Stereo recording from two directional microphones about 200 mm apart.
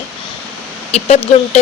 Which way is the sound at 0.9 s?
30° left (ahead or behind).